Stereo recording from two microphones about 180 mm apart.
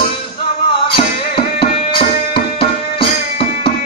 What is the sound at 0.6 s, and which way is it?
Music, 30° left (ahead or behind).